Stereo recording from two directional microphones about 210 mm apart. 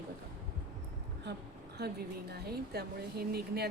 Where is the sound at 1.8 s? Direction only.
50° right (ahead or behind).